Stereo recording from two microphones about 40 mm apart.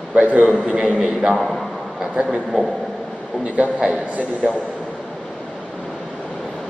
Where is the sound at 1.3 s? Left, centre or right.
Centre.